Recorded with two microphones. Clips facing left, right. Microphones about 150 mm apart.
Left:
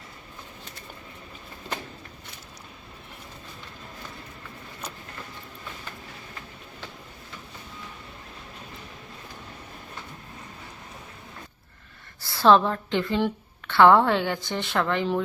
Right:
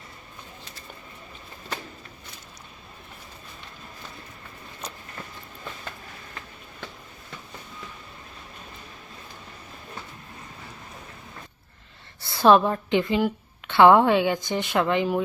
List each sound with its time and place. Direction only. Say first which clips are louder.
12.2 s a woman's voice: right 1 dB; 20° right (ahead or behind)